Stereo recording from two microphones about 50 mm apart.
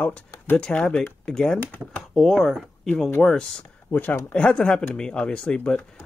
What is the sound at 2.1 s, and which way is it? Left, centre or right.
Speech, centre.